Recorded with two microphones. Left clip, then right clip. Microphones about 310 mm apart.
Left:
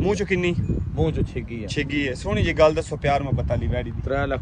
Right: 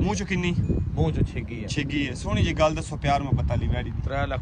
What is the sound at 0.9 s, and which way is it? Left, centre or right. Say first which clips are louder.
Speech: left 5 dB; right.